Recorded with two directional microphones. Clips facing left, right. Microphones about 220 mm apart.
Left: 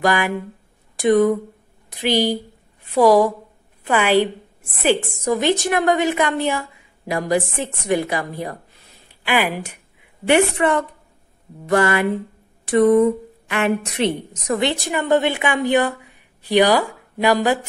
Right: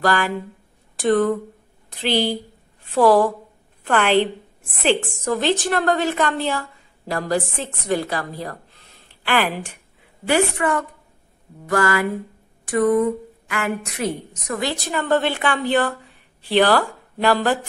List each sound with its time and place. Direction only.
0.0 s a woman's voice: 15° left (ahead or behind)
10.2 s a woman's voice: 25° left (ahead or behind)